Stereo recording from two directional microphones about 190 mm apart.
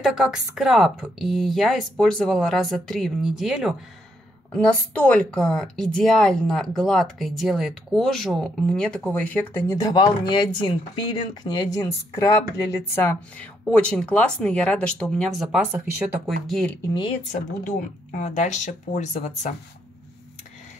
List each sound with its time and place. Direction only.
0.0 s a woman's voice: 5° right (ahead or behind)
16.4 s a woman's voice: 5° left (ahead or behind)
16.9 s speech: 30° left (ahead or behind)